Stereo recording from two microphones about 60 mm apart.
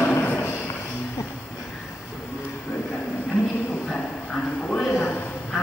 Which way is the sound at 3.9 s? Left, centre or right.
Left.